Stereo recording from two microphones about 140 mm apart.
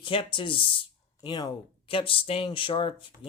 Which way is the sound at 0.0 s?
40° left (ahead or behind).